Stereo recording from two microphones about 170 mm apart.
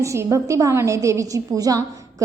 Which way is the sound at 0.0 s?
15° right (ahead or behind).